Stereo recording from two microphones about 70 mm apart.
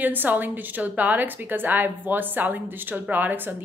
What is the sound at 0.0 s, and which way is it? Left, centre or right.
A woman's voice, right.